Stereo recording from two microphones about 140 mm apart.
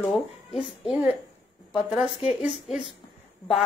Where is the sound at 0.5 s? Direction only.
5° right (ahead or behind).